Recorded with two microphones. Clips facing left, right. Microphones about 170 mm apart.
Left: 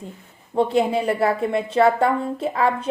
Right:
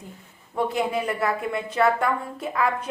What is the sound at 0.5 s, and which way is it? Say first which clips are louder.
A woman's voice: left 5 dB; 30° left (ahead or behind).